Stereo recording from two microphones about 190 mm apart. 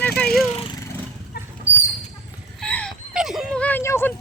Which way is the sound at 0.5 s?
30° left (ahead or behind).